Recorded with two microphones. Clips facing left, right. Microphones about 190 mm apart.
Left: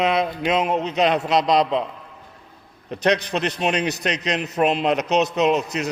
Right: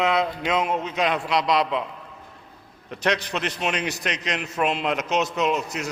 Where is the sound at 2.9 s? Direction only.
20° left (ahead or behind).